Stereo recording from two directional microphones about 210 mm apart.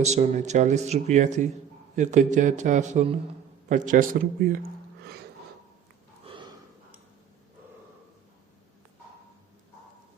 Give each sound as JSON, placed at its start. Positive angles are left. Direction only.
{"t": 0.0, "sound": "speech", "side_deg": -35}
{"t": 6.2, "sound": "gasp", "side_deg": -25}